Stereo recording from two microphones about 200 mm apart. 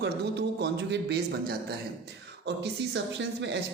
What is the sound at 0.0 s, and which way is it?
Speech, 55° right (ahead or behind).